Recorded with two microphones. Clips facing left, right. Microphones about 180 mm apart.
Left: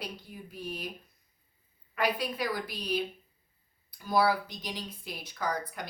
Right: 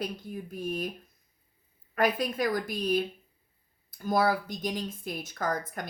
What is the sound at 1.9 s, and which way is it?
Speech, 45° right (ahead or behind).